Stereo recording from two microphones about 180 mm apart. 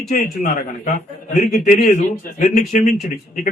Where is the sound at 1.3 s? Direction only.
45° left (ahead or behind).